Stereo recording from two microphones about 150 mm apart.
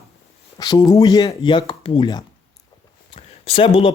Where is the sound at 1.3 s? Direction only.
35° left (ahead or behind).